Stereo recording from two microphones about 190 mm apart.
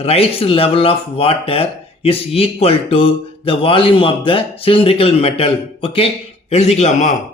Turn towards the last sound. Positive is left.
turn(degrees=35)  # may be behind; listen again after turning